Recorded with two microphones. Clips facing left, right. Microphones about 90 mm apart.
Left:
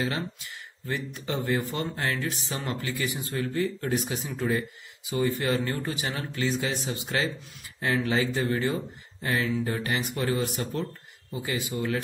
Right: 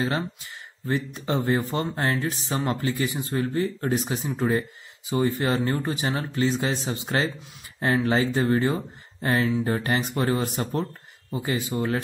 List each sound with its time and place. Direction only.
0.0 s speech: 30° right (ahead or behind)